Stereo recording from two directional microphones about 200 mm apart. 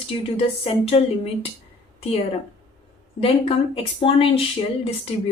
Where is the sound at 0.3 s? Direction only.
30° left (ahead or behind).